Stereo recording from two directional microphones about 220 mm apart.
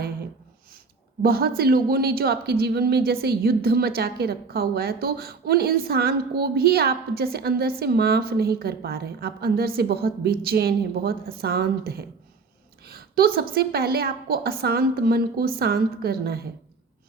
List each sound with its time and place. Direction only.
1.2 s speech: 45° right (ahead or behind)
12.9 s a sound: 45° right (ahead or behind)
13.5 s speech: 45° right (ahead or behind)